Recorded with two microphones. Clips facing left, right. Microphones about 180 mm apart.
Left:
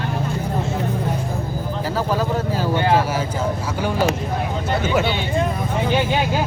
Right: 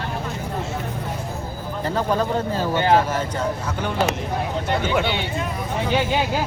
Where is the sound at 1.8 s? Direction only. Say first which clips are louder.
Right 1 dB; 5° left (ahead or behind).